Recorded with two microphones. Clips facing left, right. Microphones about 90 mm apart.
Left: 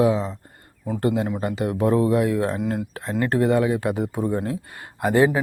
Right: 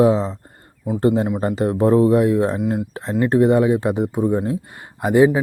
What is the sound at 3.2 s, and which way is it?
Speech, 20° right (ahead or behind).